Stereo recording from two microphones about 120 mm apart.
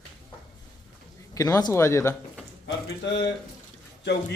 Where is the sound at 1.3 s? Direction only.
30° left (ahead or behind).